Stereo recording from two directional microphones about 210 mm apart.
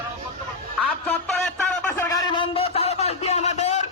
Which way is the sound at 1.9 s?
15° left (ahead or behind).